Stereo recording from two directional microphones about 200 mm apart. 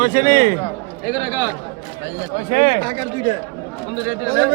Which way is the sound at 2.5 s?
45° right (ahead or behind).